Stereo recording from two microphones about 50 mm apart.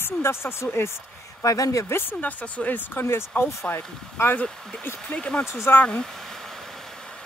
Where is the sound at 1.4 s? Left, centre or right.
Left.